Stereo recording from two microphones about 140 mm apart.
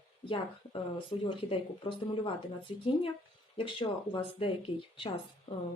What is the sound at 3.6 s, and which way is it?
Speech, 35° left (ahead or behind).